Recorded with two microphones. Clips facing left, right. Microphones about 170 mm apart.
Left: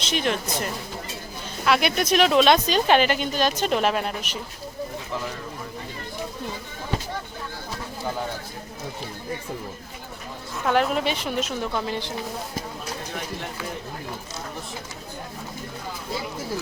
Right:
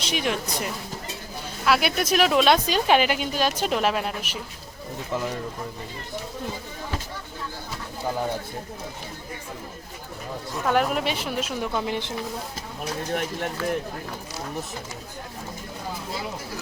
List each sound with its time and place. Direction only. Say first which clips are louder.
0.0 s a woman's voice: left 1 dB; 10° right (ahead or behind)
10.7 s a woman's voice: left 1 dB; 5° right (ahead or behind)